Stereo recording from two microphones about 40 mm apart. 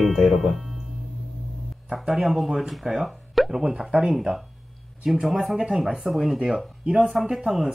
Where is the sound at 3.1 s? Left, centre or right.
Centre.